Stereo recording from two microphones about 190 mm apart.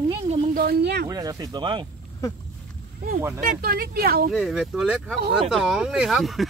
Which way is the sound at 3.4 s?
50° right (ahead or behind).